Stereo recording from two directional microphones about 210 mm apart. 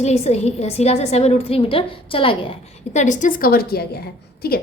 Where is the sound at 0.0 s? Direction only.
30° left (ahead or behind).